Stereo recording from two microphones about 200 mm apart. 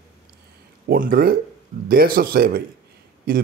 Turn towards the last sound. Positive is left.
turn(degrees=-45)  # may be behind; listen again after turning